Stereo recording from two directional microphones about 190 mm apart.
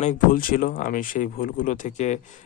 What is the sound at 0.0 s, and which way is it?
Speech, 45° left (ahead or behind).